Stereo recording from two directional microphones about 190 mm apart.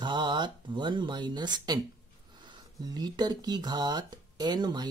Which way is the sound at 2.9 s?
20° right (ahead or behind).